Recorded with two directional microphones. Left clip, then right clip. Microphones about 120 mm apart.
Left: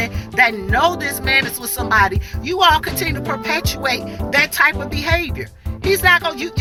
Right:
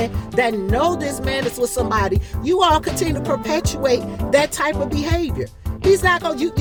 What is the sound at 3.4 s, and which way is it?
Speech, 40° right (ahead or behind).